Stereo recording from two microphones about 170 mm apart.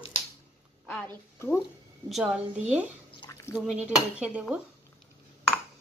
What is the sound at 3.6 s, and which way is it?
Speech, 5° right (ahead or behind).